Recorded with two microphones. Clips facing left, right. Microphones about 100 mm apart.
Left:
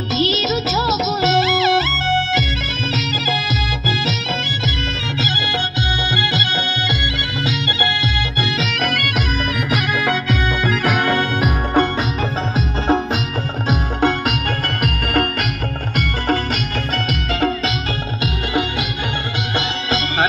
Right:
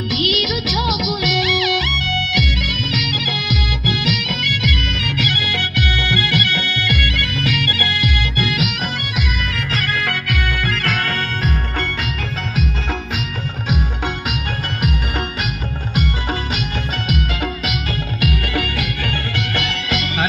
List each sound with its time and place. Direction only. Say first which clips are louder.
0.1 s music: left 3 dB; 30° left (ahead or behind)
5.8 s music: even; 25° left (ahead or behind)
8.8 s music: left 5 dB; 60° left (ahead or behind)
10.6 s music: left 4 dB; 15° left (ahead or behind)
12.5 s music: left 7 dB; 35° left (ahead or behind)
17.1 s music: left 3 dB; 40° left (ahead or behind)
18.2 s music: left 1 dB; 25° left (ahead or behind)